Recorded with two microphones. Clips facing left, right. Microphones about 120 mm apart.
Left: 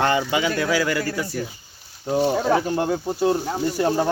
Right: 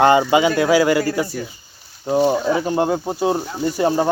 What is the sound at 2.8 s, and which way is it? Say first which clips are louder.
Speech: right 4 dB; 60° right (ahead or behind).